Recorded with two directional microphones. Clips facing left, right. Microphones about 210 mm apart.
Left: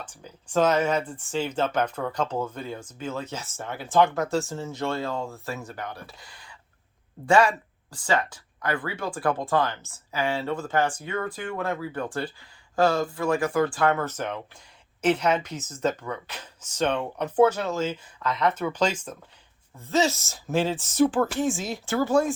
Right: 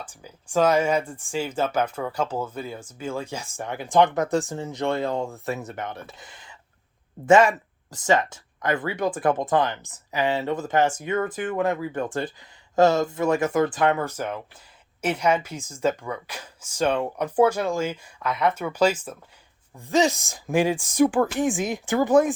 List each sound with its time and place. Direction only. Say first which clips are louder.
0.0 s speech: right 1 dB; 10° right (ahead or behind)